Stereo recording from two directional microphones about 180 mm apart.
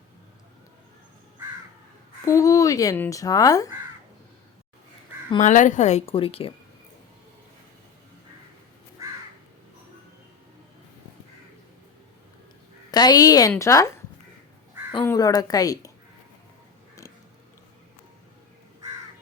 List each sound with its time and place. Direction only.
2.2 s speech: 20° left (ahead or behind)
5.4 s speech: 45° left (ahead or behind)
12.9 s a woman's voice: 20° left (ahead or behind)
14.9 s speech: 15° left (ahead or behind)